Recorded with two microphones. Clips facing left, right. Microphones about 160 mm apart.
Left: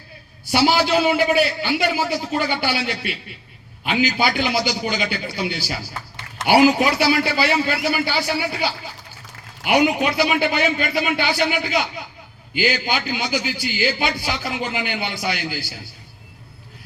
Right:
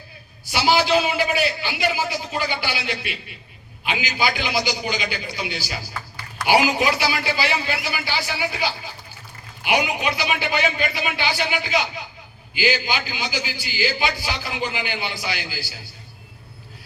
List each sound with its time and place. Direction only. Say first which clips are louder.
0.5 s a man's voice: left 1 dB; 55° left (ahead or behind)
5.9 s a sound: even; 20° left (ahead or behind)
6.5 s a man's voice: left 4 dB; 55° left (ahead or behind)